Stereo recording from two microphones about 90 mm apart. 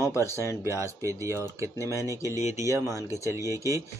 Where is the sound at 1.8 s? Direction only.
35° left (ahead or behind).